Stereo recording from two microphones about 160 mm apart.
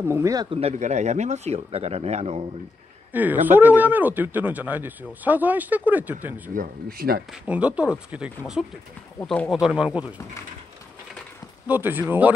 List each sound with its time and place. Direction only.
0.0 s speech: 20° right (ahead or behind)
0.5 s speech: 40° right (ahead or behind)
3.1 s speech: 10° right (ahead or behind)
6.5 s speech: 65° right (ahead or behind)
7.4 s speech: 10° right (ahead or behind)
9.2 s speech: 10° left (ahead or behind)
9.5 s speech: centre (ahead or behind)
11.6 s speech: 10° right (ahead or behind)